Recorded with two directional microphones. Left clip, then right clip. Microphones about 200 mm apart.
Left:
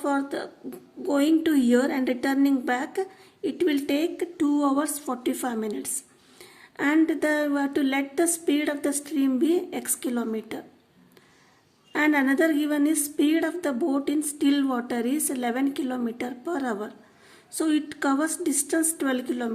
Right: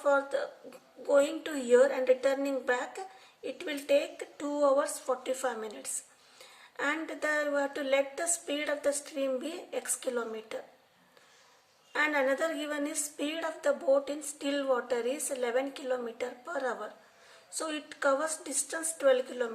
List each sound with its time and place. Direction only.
0.0 s a woman's voice: 40° left (ahead or behind)
11.9 s a woman's voice: 40° left (ahead or behind)